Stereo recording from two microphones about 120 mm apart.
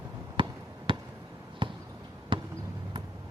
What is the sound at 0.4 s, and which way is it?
Basketball bounce, 45° right (ahead or behind).